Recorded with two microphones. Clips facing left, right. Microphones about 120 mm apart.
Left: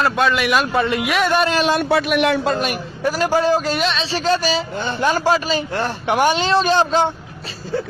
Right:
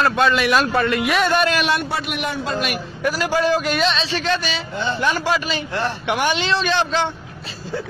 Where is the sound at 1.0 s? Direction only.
5° left (ahead or behind).